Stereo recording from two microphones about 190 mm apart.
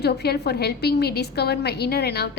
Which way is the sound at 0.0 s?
60° left (ahead or behind).